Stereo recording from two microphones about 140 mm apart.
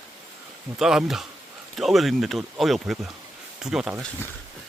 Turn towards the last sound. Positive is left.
turn(degrees=-5)  # may be behind; listen again after turning